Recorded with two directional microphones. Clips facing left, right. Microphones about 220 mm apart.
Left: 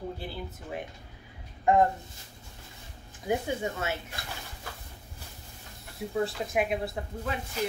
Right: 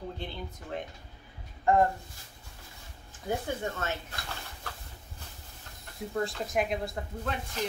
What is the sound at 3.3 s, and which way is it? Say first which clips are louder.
Speech: left 3 dB; 10° left (ahead or behind).